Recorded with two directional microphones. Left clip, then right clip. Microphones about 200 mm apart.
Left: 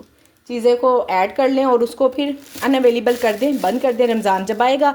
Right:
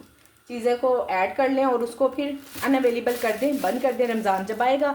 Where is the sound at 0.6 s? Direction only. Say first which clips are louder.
Left 7 dB; 45° left (ahead or behind).